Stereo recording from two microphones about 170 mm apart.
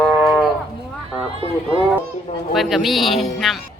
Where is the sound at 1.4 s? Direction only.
35° right (ahead or behind).